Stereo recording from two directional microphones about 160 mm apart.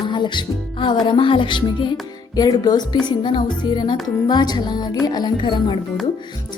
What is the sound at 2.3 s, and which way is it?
Music, 25° left (ahead or behind).